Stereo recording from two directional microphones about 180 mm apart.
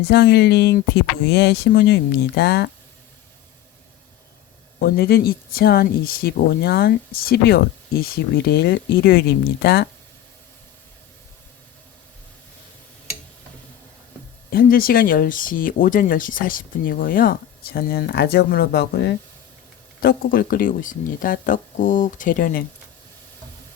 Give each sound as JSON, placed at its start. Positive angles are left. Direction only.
{"t": 0.0, "sound": "speech", "side_deg": 65}
{"t": 4.8, "sound": "speech", "side_deg": 60}
{"t": 14.5, "sound": "speech", "side_deg": 55}
{"t": 20.0, "sound": "speech", "side_deg": 55}